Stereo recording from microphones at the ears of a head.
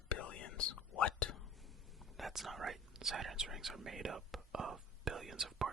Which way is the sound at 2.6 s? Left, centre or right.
Right.